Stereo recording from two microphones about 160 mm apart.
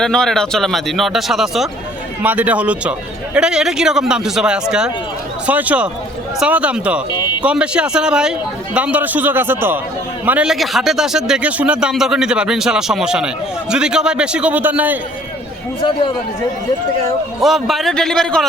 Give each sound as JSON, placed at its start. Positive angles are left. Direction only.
{"t": 0.0, "sound": "a man's voice", "side_deg": 5}
{"t": 7.1, "sound": "speech", "side_deg": 30}
{"t": 7.4, "sound": "a man's voice", "side_deg": -5}
{"t": 17.4, "sound": "speech", "side_deg": 0}